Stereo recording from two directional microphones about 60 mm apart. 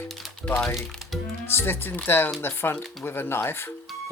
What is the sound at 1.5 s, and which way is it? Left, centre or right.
Speech, left.